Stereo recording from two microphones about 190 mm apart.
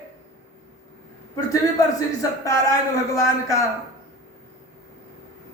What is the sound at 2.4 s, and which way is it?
A man's voice, 15° left (ahead or behind).